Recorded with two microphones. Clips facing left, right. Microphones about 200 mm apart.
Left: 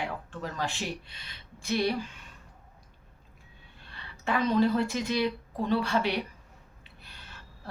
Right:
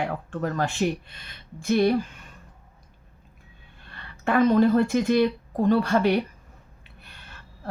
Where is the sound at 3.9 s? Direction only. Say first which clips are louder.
Right 5 dB; 55° right (ahead or behind).